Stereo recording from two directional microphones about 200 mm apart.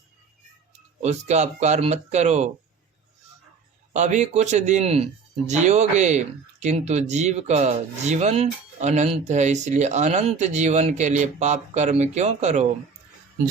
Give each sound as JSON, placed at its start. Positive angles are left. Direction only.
{"t": 1.0, "sound": "speech", "side_deg": -35}
{"t": 3.9, "sound": "speech", "side_deg": -35}